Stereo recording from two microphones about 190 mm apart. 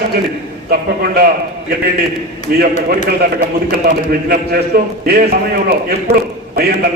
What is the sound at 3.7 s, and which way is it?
A man's voice, 50° right (ahead or behind).